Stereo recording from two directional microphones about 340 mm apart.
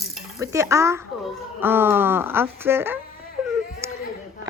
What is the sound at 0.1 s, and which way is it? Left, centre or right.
Speech, centre.